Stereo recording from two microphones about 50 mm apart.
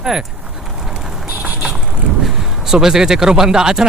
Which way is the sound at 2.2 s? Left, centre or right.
Centre.